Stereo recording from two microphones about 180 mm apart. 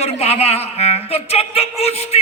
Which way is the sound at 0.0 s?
35° left (ahead or behind).